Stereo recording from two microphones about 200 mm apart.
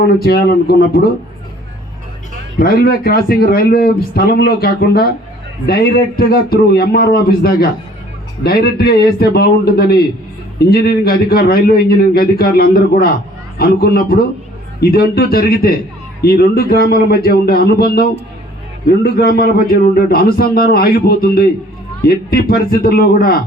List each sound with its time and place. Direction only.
0.2 s a man's voice: 50° left (ahead or behind)
2.6 s a man's voice: 50° left (ahead or behind)